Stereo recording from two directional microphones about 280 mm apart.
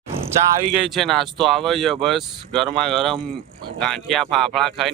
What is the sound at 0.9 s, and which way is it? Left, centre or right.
Speech, centre.